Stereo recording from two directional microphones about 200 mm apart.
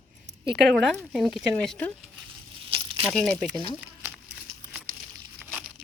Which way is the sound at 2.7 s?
25° right (ahead or behind).